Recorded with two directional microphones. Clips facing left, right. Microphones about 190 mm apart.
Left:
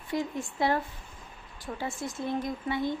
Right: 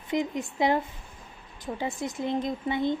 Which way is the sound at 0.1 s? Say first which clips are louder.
Right 3 dB; 20° right (ahead or behind).